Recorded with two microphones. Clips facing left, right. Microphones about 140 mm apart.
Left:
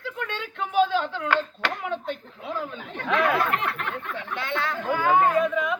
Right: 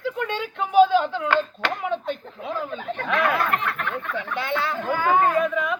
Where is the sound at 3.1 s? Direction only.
25° left (ahead or behind).